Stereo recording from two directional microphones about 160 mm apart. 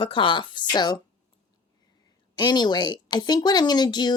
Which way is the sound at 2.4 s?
25° left (ahead or behind).